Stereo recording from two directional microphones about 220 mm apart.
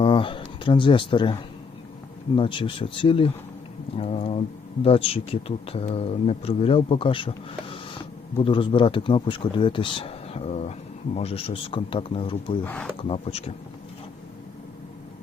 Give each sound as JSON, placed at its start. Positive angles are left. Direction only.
{"t": 0.0, "sound": "speech", "side_deg": 25}
{"t": 12.6, "sound": "speech", "side_deg": 5}
{"t": 13.0, "sound": "speech", "side_deg": 25}